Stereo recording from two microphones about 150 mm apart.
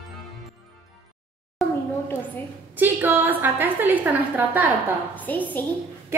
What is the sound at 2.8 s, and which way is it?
A woman's voice, 15° right (ahead or behind).